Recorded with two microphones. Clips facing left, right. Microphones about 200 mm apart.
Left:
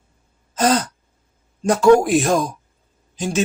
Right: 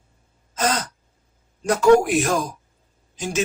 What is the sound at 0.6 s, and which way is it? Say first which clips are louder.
A man's voice: left 6 dB; 30° left (ahead or behind).